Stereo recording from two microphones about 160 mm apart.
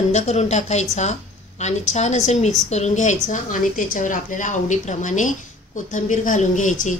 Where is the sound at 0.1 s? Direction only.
45° left (ahead or behind).